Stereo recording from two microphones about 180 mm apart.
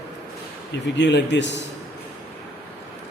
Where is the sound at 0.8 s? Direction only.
75° left (ahead or behind).